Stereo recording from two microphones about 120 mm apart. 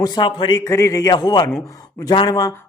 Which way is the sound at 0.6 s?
25° left (ahead or behind).